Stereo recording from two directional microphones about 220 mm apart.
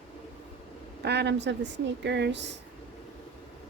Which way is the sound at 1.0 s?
50° right (ahead or behind).